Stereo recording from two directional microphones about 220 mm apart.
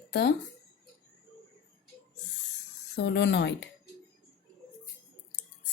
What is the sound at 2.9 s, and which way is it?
Speech, 50° left (ahead or behind).